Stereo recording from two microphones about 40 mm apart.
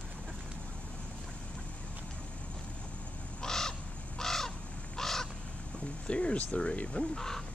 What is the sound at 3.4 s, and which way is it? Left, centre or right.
Crow, centre.